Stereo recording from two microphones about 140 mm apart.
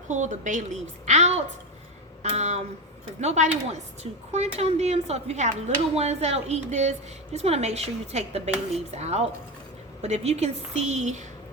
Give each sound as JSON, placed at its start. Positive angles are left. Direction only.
{"t": 0.1, "sound": "a woman's voice", "side_deg": -60}